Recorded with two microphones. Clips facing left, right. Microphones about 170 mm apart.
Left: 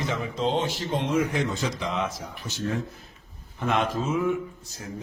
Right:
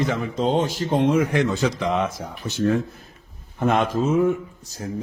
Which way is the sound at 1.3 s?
70° right (ahead or behind).